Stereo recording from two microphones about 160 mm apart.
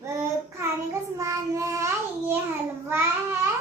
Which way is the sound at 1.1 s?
20° right (ahead or behind).